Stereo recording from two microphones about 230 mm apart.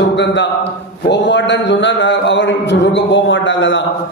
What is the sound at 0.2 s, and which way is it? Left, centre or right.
Speech, left.